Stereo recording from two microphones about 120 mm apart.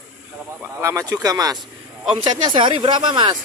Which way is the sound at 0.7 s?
25° right (ahead or behind).